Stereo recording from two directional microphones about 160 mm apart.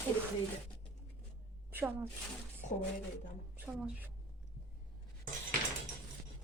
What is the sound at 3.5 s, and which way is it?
Speech, 10° right (ahead or behind).